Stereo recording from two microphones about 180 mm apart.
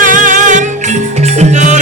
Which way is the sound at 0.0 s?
45° right (ahead or behind).